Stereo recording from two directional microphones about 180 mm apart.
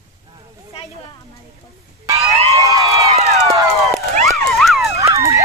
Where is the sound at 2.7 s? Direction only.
20° right (ahead or behind).